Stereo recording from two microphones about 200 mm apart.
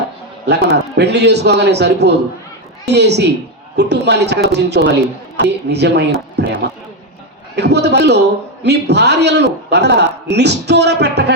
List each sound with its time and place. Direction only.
0.4 s a man's voice: 55° right (ahead or behind)